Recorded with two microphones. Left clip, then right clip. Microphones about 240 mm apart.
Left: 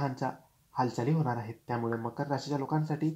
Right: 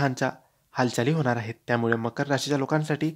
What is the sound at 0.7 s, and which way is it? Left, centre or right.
Speech, right.